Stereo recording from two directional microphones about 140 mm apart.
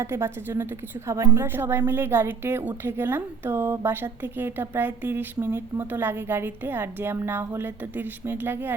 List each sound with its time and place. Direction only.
0.0 s a woman's voice: 20° right (ahead or behind)